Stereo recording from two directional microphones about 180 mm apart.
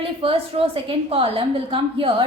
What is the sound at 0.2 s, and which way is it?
A woman's voice, 30° right (ahead or behind).